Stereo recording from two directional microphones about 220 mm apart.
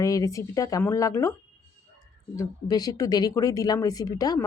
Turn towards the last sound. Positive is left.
turn(degrees=15)  # may be behind; listen again after turning